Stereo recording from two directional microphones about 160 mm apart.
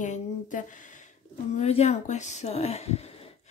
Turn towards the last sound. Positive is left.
turn(degrees=40)  # may be behind; listen again after turning